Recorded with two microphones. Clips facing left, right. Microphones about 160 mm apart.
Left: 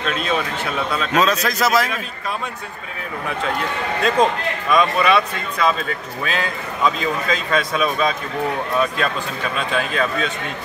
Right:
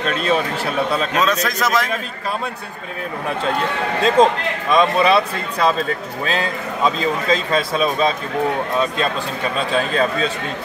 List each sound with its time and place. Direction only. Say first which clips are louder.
0.0 s a sound: right 3 dB; 40° right (ahead or behind)
1.1 s a man's voice: left 1 dB; centre (ahead or behind)
4.0 s a man's voice: right 3 dB; 30° right (ahead or behind)